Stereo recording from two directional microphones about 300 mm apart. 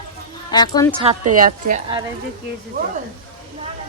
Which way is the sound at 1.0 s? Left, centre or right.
Right.